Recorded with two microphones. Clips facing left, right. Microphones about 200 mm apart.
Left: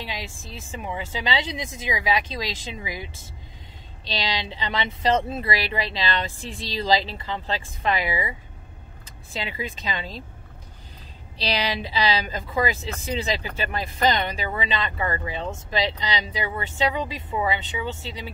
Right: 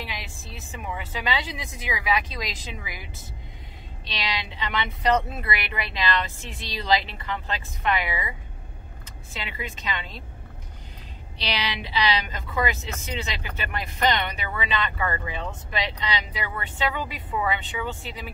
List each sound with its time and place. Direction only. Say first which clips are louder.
0.0 s a sound: left 3 dB; 30° left (ahead or behind)
0.7 s speech: left 3 dB; 25° left (ahead or behind)
4.1 s speech: left 3 dB; 30° left (ahead or behind)
9.3 s speech: left 4 dB; 35° left (ahead or behind)
11.3 s speech: left 4 dB; 35° left (ahead or behind)